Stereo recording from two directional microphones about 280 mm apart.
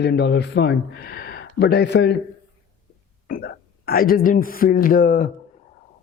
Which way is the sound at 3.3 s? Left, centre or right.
Left.